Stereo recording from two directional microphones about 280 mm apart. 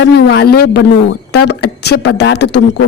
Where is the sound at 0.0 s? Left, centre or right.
Left.